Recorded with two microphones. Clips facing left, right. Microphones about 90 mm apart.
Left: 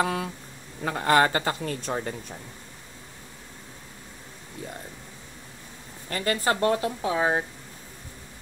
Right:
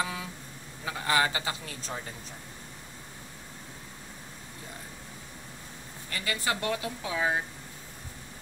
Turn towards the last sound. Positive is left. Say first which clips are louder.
# left 5 dB
turn(degrees=30)  # may be behind; listen again after turning